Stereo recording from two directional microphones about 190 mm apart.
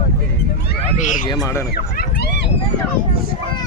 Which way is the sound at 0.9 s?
45° left (ahead or behind).